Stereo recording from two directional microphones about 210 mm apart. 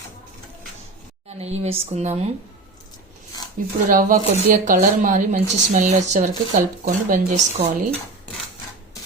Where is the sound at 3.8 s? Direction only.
40° right (ahead or behind).